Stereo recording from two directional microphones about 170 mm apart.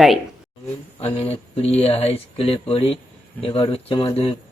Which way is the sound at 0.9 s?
35° left (ahead or behind).